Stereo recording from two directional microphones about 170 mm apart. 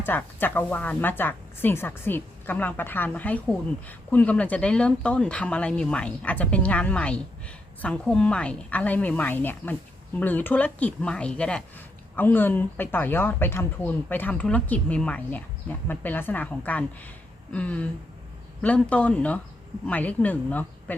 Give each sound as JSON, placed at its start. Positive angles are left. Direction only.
{"t": 0.0, "sound": "a woman's voice", "side_deg": 10}